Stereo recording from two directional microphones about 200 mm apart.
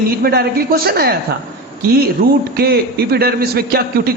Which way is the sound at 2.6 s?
50° right (ahead or behind).